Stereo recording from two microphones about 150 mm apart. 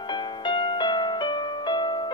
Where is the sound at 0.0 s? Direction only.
30° left (ahead or behind).